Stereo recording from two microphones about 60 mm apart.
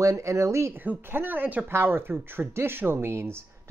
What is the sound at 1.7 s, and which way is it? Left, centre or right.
Speech, right.